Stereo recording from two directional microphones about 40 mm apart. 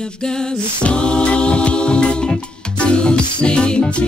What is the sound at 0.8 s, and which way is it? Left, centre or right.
Music, left.